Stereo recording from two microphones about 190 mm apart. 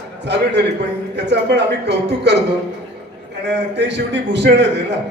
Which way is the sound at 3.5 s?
65° right (ahead or behind).